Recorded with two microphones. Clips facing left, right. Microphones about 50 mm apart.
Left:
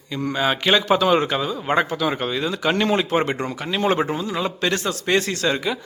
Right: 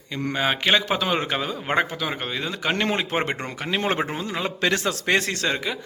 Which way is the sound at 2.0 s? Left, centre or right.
Centre.